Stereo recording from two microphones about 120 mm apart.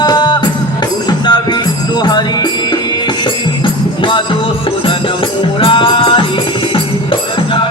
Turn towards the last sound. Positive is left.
turn(degrees=45)  # may be behind; listen again after turning